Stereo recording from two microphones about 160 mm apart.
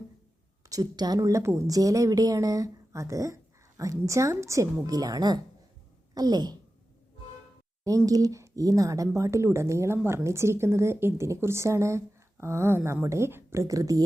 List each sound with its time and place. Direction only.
0.7 s a woman's voice: 25° right (ahead or behind)
7.9 s speech: 20° right (ahead or behind)